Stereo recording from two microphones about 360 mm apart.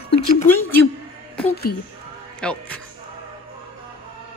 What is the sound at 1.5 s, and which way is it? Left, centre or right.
Speech, left.